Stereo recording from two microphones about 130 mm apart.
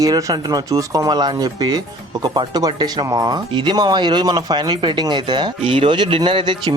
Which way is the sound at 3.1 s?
30° right (ahead or behind).